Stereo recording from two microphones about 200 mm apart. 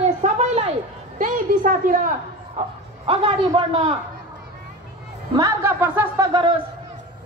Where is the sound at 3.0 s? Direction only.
25° right (ahead or behind).